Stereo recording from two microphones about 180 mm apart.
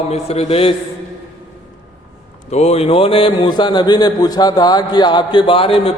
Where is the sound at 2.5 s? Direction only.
35° left (ahead or behind).